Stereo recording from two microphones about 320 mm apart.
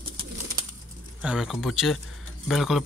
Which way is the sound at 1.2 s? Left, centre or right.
Centre.